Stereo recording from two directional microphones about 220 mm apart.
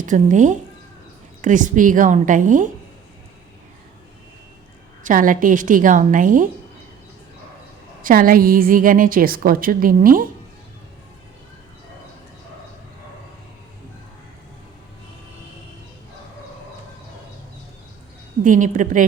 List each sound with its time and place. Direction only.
0.0 s a woman's voice: 35° right (ahead or behind)
5.0 s a woman's voice: 35° right (ahead or behind)
8.0 s a woman's voice: 40° right (ahead or behind)
18.4 s a woman's voice: 35° right (ahead or behind)